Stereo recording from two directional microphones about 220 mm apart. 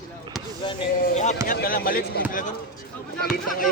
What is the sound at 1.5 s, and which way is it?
Speech, 40° left (ahead or behind).